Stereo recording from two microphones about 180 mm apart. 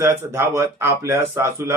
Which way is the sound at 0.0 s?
15° right (ahead or behind).